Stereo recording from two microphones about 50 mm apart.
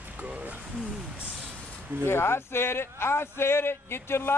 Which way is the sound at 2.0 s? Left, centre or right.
Left.